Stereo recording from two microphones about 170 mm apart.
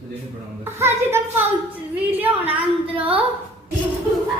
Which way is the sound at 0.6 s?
15° right (ahead or behind).